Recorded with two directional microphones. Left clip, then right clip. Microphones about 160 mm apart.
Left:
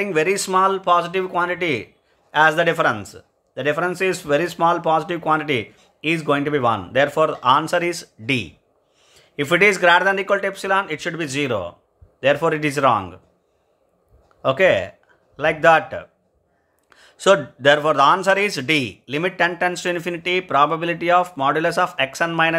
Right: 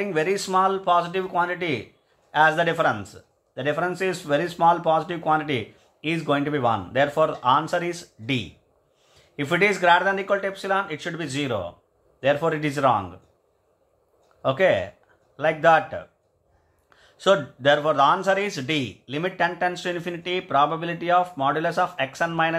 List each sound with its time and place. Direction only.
0.0 s speech: 35° left (ahead or behind)
14.4 s speech: 35° left (ahead or behind)